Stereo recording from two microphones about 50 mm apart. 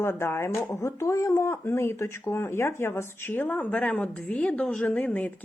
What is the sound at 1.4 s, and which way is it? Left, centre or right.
Speech, left.